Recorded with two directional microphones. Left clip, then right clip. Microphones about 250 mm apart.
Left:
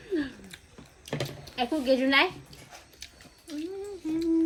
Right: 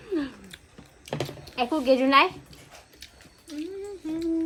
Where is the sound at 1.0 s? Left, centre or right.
Centre.